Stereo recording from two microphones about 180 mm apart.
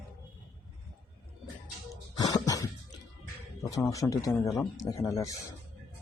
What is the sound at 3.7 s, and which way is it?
Speech, 15° left (ahead or behind).